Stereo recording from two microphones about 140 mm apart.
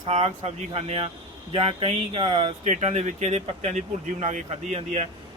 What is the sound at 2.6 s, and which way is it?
Speech, 55° right (ahead or behind).